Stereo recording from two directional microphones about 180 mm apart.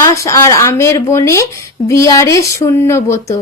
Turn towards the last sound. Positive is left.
turn(degrees=15)  # may be behind; listen again after turning